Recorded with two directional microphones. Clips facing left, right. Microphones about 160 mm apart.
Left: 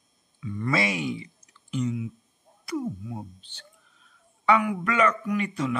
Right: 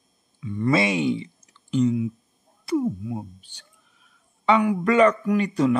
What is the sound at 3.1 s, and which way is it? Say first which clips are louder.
Speech: right 5 dB; 10° right (ahead or behind).